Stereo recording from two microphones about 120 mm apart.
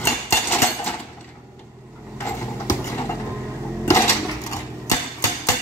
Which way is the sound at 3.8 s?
25° left (ahead or behind).